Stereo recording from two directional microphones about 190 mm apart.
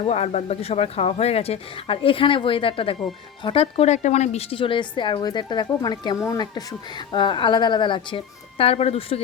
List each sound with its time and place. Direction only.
0.0 s a woman's voice: 30° left (ahead or behind)